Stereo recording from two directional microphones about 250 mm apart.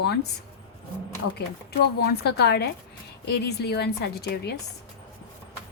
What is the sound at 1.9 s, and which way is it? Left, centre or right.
A woman's voice, left.